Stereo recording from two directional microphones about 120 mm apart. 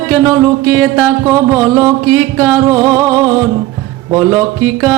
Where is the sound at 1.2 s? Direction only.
25° right (ahead or behind).